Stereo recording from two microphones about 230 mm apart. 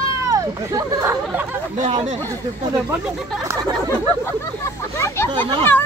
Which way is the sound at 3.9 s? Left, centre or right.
Centre.